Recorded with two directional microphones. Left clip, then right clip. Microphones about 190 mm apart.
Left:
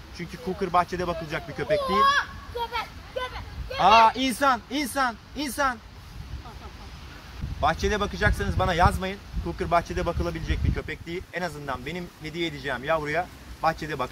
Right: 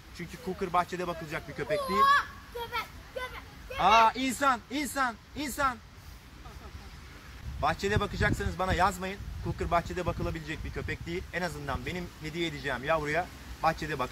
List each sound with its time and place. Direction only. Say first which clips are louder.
0.2 s speech: left 5 dB; 5° left (ahead or behind)
1.9 s a child's voice: left 2 dB; 50° right (ahead or behind)
2.7 s a sound: left 5 dB; 50° right (ahead or behind)
3.7 s speech: left 5 dB; centre (ahead or behind)
7.6 s speech: left 5 dB; centre (ahead or behind)